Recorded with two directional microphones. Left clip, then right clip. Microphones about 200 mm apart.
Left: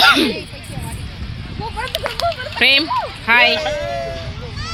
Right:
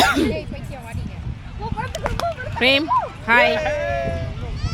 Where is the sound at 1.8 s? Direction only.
30° left (ahead or behind).